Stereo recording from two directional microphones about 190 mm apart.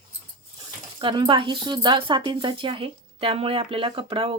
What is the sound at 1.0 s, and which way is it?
A woman's voice, 25° right (ahead or behind).